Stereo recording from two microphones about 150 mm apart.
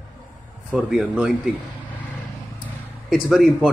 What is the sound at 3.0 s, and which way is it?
Speech, centre (ahead or behind).